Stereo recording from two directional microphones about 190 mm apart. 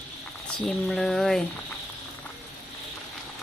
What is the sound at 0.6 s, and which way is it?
Speech, centre (ahead or behind).